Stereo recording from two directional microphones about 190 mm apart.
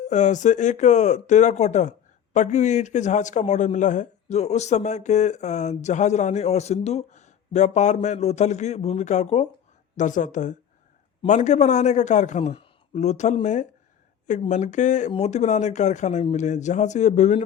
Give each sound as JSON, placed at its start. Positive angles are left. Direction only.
{"t": 0.0, "sound": "speech", "side_deg": 40}